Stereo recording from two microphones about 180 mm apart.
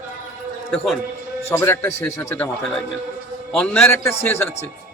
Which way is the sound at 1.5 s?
10° left (ahead or behind).